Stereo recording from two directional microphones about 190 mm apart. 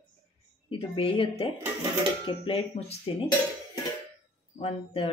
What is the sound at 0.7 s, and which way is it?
Speech, 30° left (ahead or behind).